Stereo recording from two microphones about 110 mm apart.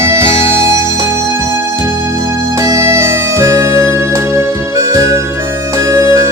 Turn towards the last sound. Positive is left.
turn(degrees=-20)  # may be behind; listen again after turning